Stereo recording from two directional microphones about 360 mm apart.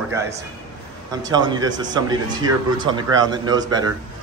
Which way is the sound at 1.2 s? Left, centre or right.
Centre.